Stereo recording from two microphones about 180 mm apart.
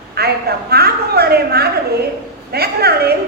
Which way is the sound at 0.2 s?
60° right (ahead or behind).